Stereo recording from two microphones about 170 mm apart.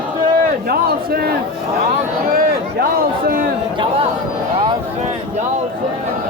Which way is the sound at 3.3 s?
60° right (ahead or behind).